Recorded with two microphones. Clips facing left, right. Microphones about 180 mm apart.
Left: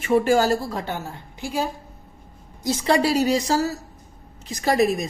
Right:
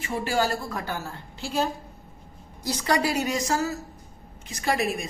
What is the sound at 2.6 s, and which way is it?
A woman's voice, 25° left (ahead or behind).